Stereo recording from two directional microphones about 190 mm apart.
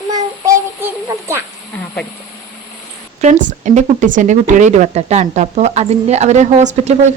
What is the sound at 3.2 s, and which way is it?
Speech, 40° right (ahead or behind).